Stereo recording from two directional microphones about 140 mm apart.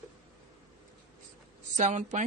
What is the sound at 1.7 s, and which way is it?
Speech, 55° right (ahead or behind).